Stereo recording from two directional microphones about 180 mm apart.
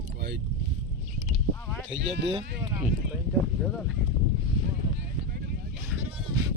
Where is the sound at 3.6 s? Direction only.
Centre (ahead or behind).